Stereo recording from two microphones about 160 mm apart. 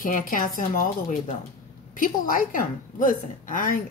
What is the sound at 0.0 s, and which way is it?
Speech, 55° left (ahead or behind).